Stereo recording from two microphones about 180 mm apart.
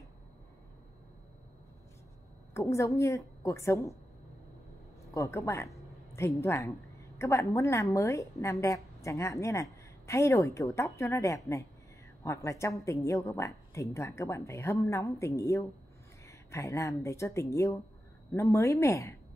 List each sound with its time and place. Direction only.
2.5 s a woman's voice: 15° left (ahead or behind)
5.1 s a woman's voice: 15° left (ahead or behind)